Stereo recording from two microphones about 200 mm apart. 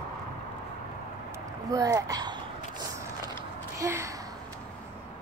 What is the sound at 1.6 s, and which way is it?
Speech, 15° right (ahead or behind).